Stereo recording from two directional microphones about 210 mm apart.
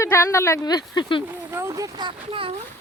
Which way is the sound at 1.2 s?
10° right (ahead or behind).